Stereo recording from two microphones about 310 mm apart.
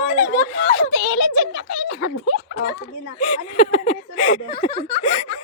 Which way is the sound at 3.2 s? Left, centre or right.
Left.